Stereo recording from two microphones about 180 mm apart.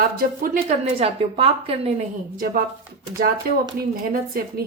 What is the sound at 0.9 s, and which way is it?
Speech, 35° right (ahead or behind).